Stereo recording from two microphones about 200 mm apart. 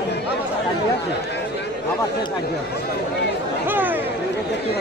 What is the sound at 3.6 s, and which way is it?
Speech, 10° right (ahead or behind).